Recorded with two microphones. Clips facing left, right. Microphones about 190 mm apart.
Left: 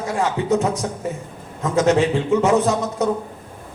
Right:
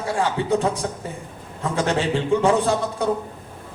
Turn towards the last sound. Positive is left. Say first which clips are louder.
# left 2 dB
turn(degrees=-30)  # may be behind; listen again after turning